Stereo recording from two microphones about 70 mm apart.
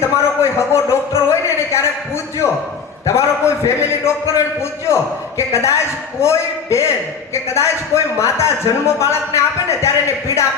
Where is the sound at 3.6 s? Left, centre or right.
Left.